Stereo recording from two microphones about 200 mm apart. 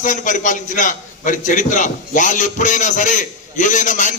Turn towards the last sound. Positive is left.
turn(degrees=40)  # may be behind; listen again after turning